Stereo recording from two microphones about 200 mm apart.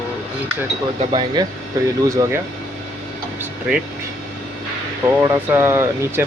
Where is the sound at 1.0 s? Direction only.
25° right (ahead or behind).